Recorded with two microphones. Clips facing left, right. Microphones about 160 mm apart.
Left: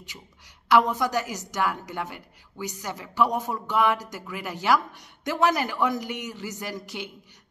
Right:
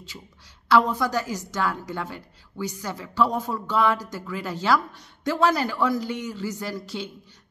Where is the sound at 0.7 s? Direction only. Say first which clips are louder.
Right 1 dB; 15° left (ahead or behind).